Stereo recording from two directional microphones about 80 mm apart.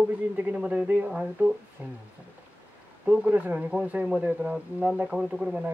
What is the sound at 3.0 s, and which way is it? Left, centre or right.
Speech, centre.